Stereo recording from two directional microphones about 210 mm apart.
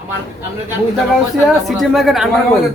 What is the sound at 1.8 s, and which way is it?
Speech, centre (ahead or behind).